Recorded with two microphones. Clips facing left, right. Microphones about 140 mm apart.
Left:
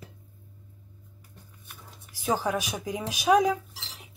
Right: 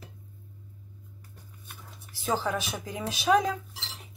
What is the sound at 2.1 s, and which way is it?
Speech, 15° left (ahead or behind).